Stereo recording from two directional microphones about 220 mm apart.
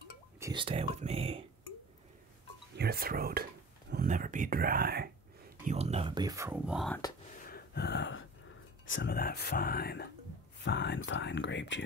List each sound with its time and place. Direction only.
0.4 s speech: 20° right (ahead or behind)
2.8 s speech: 45° right (ahead or behind)
5.7 s speech: 30° right (ahead or behind); by 7.0 s centre (ahead or behind)
7.4 s gasp: 45° left (ahead or behind)
8.8 s speech: 55° left (ahead or behind)